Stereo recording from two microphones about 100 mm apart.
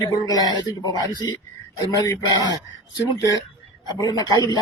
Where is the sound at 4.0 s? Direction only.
40° left (ahead or behind).